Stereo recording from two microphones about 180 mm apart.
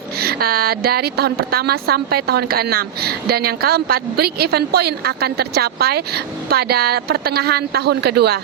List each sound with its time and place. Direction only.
0.2 s a woman's voice: 60° right (ahead or behind)